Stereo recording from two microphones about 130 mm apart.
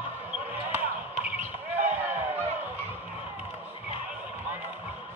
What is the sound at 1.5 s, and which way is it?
Basketball bounce, 65° right (ahead or behind).